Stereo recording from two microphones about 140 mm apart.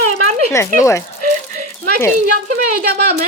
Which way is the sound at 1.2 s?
70° right (ahead or behind).